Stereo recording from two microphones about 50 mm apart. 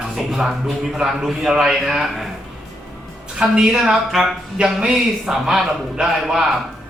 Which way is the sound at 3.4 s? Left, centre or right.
Centre.